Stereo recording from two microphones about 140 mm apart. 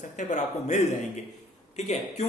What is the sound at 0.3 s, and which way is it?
A man's voice, 60° left (ahead or behind).